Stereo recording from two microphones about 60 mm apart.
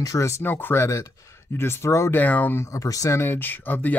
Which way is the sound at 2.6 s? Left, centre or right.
Left.